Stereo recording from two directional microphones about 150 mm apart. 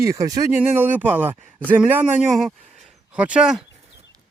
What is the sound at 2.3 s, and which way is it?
Speech, centre (ahead or behind).